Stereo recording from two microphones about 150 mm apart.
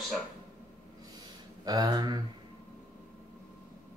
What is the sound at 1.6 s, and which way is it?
Speech, 25° right (ahead or behind).